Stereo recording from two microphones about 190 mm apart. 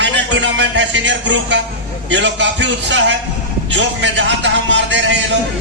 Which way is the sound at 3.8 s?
75° right (ahead or behind).